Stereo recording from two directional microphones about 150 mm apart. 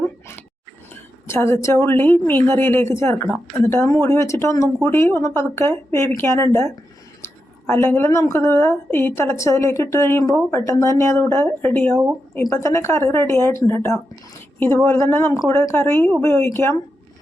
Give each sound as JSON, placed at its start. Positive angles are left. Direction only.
{"t": 1.3, "sound": "speech", "side_deg": 15}
{"t": 7.7, "sound": "speech", "side_deg": 15}